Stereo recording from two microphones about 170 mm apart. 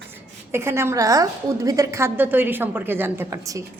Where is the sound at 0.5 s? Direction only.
15° right (ahead or behind).